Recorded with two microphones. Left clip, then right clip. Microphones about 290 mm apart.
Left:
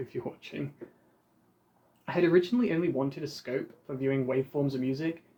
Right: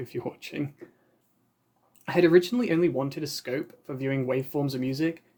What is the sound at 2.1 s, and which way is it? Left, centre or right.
A man's voice, right.